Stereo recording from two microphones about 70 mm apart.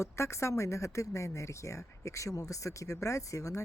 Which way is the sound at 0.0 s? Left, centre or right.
Left.